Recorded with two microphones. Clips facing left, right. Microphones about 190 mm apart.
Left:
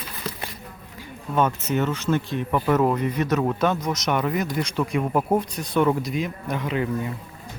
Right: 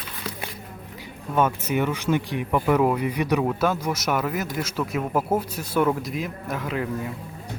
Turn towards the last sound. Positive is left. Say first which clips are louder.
# left 2 dB
turn(degrees=0)  # may be behind; listen again after turning